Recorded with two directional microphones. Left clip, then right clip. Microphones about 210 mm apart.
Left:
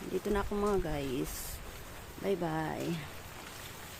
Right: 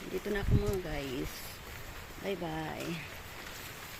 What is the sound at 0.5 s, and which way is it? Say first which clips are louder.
Speech: left 2 dB; 20° left (ahead or behind).